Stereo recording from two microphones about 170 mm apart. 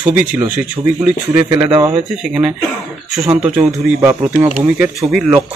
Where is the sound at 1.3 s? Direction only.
30° right (ahead or behind).